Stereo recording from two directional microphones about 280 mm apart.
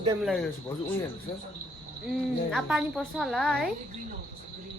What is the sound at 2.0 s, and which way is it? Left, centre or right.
Speech, centre.